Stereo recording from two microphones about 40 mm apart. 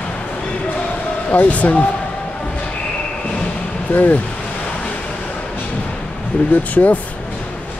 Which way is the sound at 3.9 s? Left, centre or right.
Left.